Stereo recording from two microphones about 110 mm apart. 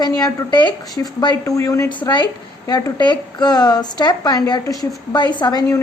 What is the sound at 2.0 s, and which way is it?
A woman's voice, 45° left (ahead or behind).